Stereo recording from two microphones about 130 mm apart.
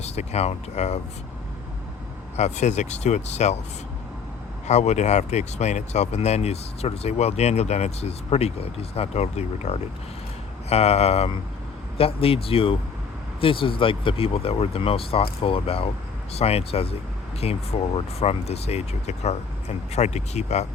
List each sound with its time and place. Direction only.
0.0 s speech: 55° left (ahead or behind)
2.3 s speech: 60° left (ahead or behind)
4.7 s speech: 60° left (ahead or behind)